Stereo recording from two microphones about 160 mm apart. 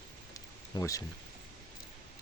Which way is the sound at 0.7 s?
20° left (ahead or behind).